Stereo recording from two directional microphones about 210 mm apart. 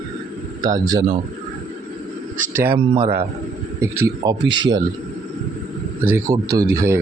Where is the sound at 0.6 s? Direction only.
15° right (ahead or behind).